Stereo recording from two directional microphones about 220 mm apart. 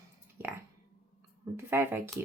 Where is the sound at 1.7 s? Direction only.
10° right (ahead or behind).